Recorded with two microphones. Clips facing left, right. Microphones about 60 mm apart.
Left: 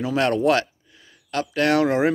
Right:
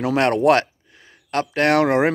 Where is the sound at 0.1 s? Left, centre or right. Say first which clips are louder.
Right 3 dB; right.